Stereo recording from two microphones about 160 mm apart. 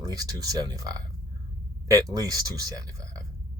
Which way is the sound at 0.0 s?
25° right (ahead or behind).